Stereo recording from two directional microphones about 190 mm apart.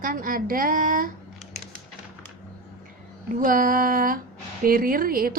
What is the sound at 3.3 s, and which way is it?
A woman's voice, 45° right (ahead or behind).